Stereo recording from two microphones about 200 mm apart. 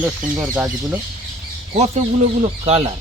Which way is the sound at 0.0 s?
10° right (ahead or behind).